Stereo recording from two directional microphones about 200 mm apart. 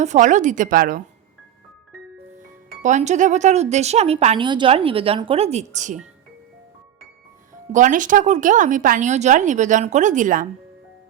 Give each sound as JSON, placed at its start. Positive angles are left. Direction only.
{"t": 0.0, "sound": "speech", "side_deg": -35}
{"t": 2.8, "sound": "speech", "side_deg": -35}
{"t": 7.7, "sound": "speech", "side_deg": -40}